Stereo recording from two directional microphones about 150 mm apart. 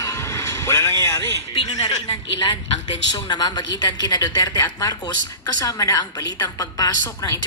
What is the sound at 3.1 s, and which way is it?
A woman's voice, 25° left (ahead or behind).